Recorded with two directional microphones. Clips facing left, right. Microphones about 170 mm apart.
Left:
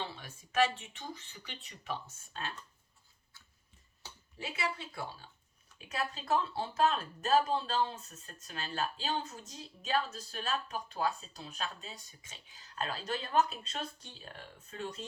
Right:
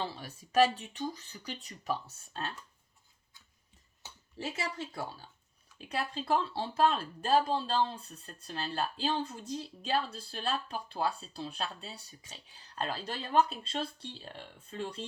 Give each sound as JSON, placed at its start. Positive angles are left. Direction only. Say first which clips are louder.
{"t": 0.0, "sound": "speech", "louder": "right 4 dB", "side_deg": -35}
{"t": 4.4, "sound": "speech", "louder": "right 1 dB", "side_deg": -40}